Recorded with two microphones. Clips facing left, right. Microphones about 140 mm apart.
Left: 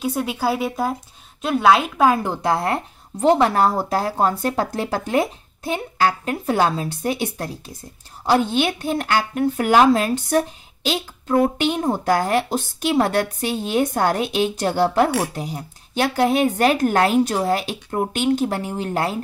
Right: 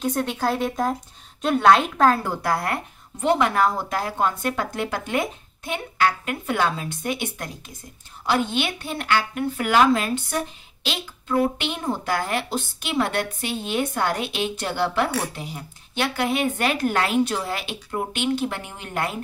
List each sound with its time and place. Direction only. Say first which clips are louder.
0.0 s a woman's voice: left 1 dB; 5° left (ahead or behind); by 19.1 s 35° left (ahead or behind)